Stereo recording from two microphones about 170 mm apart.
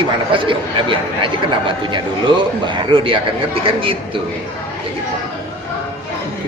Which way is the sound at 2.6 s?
30° right (ahead or behind).